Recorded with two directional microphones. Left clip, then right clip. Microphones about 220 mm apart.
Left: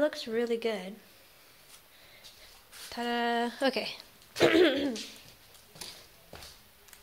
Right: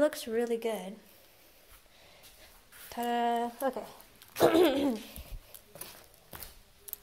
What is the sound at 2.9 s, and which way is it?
Speech, 10° left (ahead or behind).